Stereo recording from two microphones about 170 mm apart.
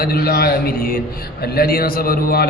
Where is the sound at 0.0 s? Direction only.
65° left (ahead or behind).